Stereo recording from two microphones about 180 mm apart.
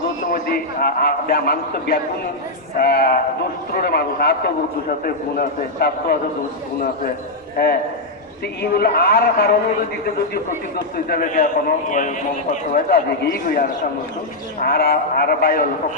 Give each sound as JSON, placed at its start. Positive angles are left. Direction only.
{"t": 0.3, "sound": "a man's voice", "side_deg": 55}
{"t": 7.5, "sound": "a man's voice", "side_deg": 60}
{"t": 10.9, "sound": "a man's voice", "side_deg": 55}